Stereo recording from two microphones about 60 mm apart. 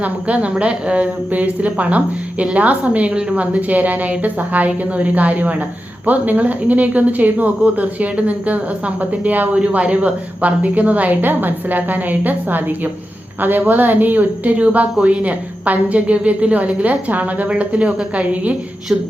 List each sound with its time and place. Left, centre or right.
0.0 s a woman's voice: right